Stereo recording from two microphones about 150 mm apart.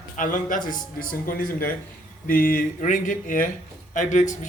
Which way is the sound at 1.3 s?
75° left (ahead or behind).